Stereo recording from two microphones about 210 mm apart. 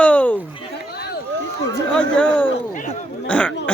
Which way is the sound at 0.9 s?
50° left (ahead or behind).